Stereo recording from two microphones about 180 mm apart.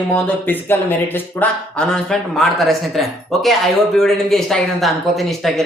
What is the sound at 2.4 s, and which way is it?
Speech, centre (ahead or behind).